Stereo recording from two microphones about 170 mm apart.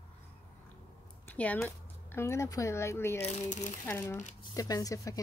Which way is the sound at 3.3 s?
45° left (ahead or behind).